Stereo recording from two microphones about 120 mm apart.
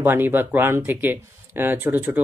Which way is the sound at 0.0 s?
15° right (ahead or behind).